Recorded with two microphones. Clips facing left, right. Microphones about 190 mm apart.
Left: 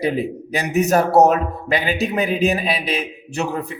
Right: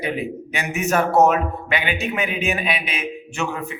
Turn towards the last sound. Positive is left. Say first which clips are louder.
# left 3 dB
turn(degrees=35)  # may be behind; listen again after turning